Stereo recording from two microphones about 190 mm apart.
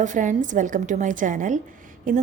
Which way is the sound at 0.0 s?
40° right (ahead or behind).